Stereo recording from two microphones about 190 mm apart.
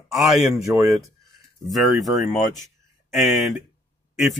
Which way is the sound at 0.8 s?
15° right (ahead or behind).